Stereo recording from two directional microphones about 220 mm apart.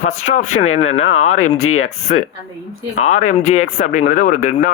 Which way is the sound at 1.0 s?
70° left (ahead or behind).